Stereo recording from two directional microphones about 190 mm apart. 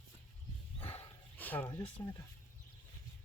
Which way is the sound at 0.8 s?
10° left (ahead or behind).